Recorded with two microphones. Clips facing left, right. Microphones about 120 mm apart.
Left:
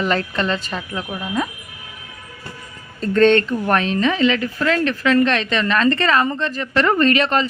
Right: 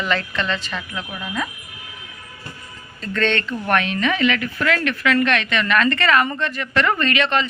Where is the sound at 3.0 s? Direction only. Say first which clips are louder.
Left 8 dB; 40° left (ahead or behind).